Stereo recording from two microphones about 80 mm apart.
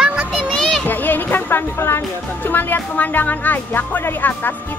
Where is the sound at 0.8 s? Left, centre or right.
Left.